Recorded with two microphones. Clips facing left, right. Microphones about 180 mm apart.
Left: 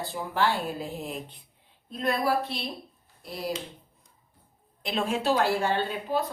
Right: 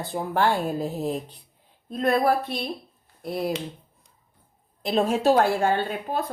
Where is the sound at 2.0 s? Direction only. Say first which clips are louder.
Right 5 dB; 55° right (ahead or behind).